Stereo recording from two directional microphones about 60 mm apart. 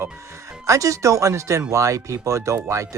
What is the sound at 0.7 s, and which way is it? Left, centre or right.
Speech, right.